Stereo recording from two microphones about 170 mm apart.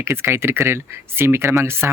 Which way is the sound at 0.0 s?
15° right (ahead or behind).